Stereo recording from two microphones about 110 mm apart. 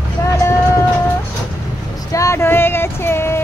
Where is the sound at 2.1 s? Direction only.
30° left (ahead or behind).